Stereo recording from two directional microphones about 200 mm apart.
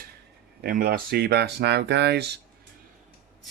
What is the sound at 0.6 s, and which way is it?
Speech, 50° right (ahead or behind).